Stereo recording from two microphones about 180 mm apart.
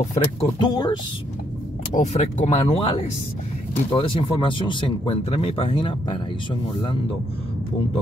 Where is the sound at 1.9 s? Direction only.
40° left (ahead or behind).